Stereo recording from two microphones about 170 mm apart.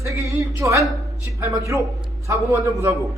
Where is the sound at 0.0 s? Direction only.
15° right (ahead or behind).